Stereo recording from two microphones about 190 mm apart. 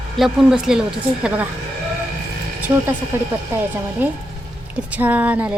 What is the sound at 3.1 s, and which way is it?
Speech, 10° right (ahead or behind).